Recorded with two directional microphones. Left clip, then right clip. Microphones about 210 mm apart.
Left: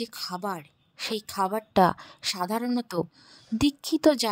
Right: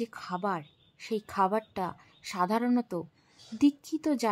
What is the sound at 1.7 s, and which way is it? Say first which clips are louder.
Speech: left 14 dB; 40° left (ahead or behind).